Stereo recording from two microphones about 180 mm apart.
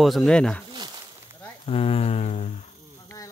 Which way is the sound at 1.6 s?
30° left (ahead or behind).